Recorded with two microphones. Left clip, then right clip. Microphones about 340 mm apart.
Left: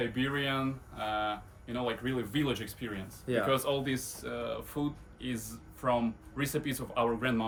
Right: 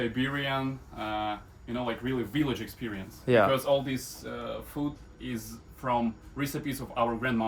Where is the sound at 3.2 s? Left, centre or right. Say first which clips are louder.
Right 7 dB; centre.